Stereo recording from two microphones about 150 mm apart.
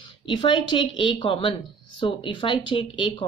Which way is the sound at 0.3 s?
35° left (ahead or behind).